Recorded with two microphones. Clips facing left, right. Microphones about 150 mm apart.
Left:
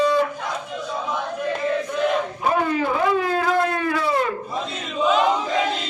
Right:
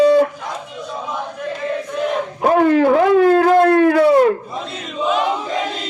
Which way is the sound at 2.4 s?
65° right (ahead or behind).